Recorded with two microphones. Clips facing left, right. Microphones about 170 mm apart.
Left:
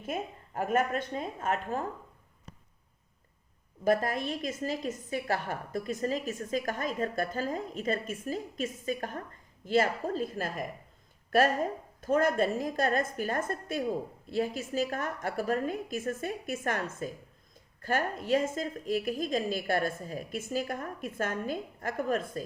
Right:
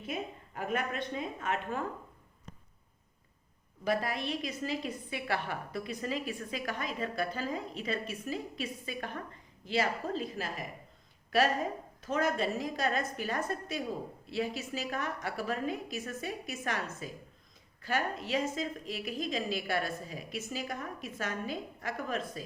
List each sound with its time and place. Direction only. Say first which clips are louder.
0.0 s a woman's voice: left 3 dB; 45° left (ahead or behind)
3.8 s a woman's voice: left 4 dB; 45° left (ahead or behind)